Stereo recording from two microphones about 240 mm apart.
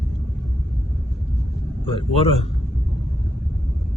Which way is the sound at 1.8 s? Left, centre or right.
Left.